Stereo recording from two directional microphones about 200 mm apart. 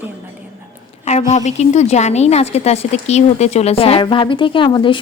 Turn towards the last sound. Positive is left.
turn(degrees=25)  # may be behind; listen again after turning